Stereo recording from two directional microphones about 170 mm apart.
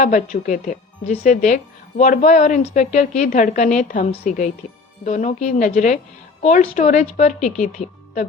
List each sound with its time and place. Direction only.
0.0 s speech: 45° left (ahead or behind)